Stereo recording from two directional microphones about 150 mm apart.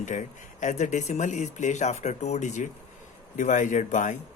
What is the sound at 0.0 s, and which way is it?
Speech, 55° left (ahead or behind).